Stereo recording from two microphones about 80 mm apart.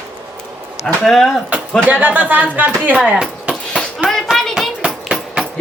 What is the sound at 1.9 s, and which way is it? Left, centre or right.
Speech, centre.